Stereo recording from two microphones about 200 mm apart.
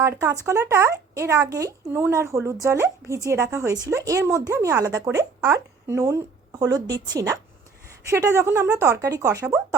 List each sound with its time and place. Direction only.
0.0 s speech: 15° right (ahead or behind)